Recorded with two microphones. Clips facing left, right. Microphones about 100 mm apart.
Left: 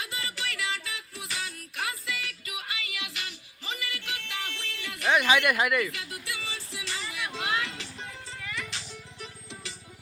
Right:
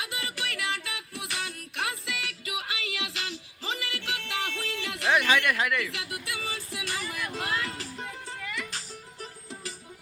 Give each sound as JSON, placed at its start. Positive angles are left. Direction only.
{"t": 0.0, "sound": "music", "side_deg": -60}
{"t": 5.1, "sound": "speech", "side_deg": 10}
{"t": 6.1, "sound": "music", "side_deg": -55}
{"t": 9.2, "sound": "music", "side_deg": -40}